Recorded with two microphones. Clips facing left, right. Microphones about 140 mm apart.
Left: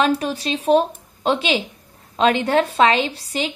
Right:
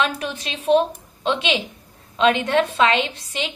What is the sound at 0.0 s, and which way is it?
A woman's voice, 35° left (ahead or behind).